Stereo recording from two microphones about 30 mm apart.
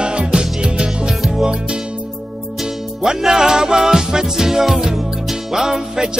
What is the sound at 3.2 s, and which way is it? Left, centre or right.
Music, centre.